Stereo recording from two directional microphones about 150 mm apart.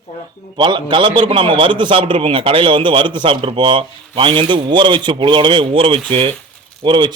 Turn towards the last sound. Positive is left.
turn(degrees=-30)  # may be behind; listen again after turning